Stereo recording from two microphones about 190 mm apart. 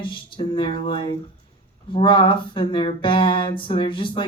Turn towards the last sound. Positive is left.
turn(degrees=25)  # may be behind; listen again after turning